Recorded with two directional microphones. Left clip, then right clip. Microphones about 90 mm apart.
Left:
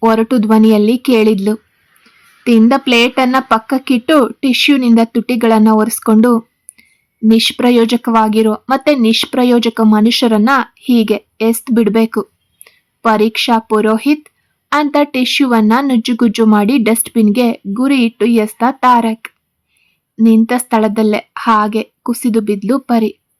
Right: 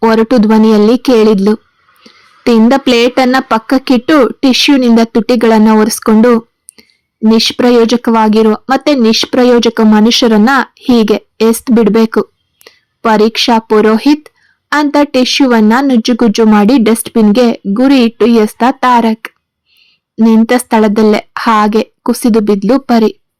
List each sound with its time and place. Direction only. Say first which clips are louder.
0.0 s speech: right 4 dB; 20° right (ahead or behind)
10.3 s a child's voice: right 3 dB; 35° right (ahead or behind); by 16.5 s 15° right (ahead or behind)
16.5 s a woman's voice: right 4 dB; 25° right (ahead or behind)